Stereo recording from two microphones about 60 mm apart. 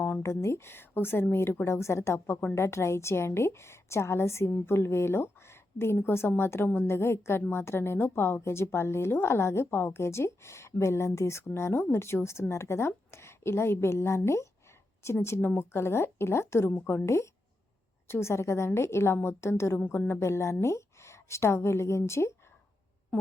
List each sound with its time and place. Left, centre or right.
0.0 s a sound: left
0.4 s a woman's voice: left
18.1 s a woman's voice: left